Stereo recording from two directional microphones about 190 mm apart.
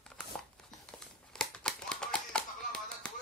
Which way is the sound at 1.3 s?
5° left (ahead or behind).